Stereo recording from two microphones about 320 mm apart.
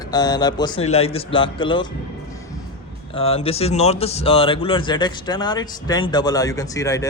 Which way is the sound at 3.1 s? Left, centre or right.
Centre.